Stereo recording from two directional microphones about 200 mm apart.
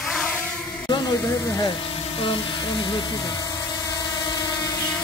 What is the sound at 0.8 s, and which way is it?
Speech, 20° left (ahead or behind).